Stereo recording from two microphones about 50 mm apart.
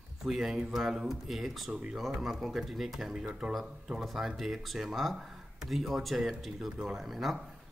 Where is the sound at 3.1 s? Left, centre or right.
Centre.